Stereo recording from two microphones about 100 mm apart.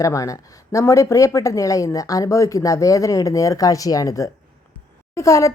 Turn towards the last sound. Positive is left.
turn(degrees=30)  # may be behind; listen again after turning